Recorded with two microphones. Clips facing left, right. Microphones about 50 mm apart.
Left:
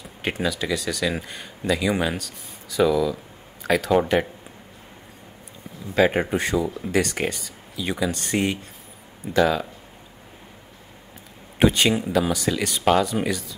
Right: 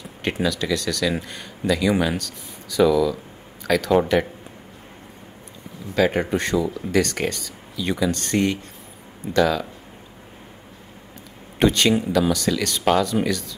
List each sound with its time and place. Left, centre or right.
0.2 s speech: centre
5.9 s speech: centre
6.2 s speech: centre
11.6 s speech: centre